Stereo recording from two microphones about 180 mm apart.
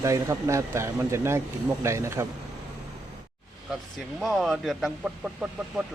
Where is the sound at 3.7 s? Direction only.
Centre (ahead or behind).